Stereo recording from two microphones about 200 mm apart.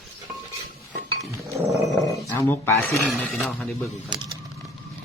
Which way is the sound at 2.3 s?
15° left (ahead or behind).